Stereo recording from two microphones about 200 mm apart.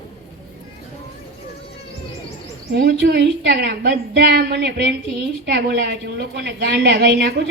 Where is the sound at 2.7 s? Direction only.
55° right (ahead or behind).